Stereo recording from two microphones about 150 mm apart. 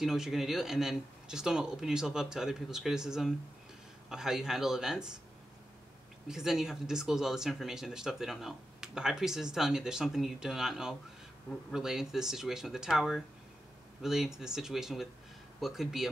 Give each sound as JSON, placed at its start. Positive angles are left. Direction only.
{"t": 0.0, "sound": "speech", "side_deg": 0}
{"t": 6.2, "sound": "speech", "side_deg": -5}